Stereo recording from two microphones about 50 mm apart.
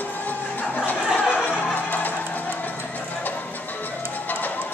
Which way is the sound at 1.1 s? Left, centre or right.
Left.